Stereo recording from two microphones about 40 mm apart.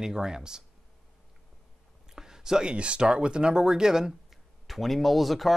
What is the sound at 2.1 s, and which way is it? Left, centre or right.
Speech, centre.